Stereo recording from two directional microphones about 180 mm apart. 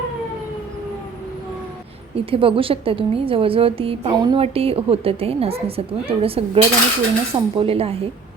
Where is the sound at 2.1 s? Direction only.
30° right (ahead or behind).